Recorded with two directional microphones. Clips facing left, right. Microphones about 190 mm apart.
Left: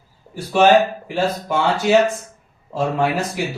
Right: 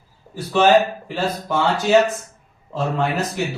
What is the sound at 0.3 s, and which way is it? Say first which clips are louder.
Speech: left 1 dB; 10° left (ahead or behind).